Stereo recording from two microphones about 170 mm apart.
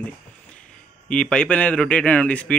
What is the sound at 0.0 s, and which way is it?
A man's voice, 5° left (ahead or behind).